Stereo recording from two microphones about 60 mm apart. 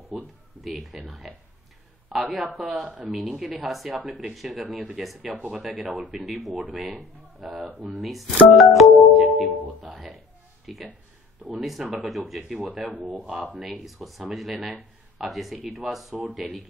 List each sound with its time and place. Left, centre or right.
0.1 s a sound: centre
0.6 s speech: centre
2.8 s speech: centre
3.1 s speech: centre
9.8 s music: centre
10.7 s speech: centre